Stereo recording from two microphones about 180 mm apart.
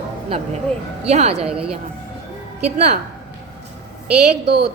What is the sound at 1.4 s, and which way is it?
Speech, 5° right (ahead or behind).